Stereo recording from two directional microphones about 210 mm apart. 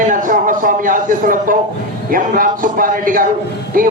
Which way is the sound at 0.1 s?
40° right (ahead or behind).